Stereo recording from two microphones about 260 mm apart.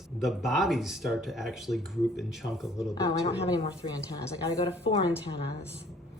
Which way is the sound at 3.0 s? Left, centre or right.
Centre.